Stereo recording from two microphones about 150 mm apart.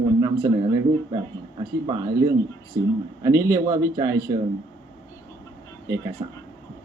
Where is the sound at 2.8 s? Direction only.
70° right (ahead or behind).